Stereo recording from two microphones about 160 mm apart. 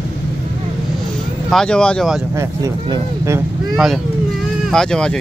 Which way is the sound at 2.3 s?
20° right (ahead or behind).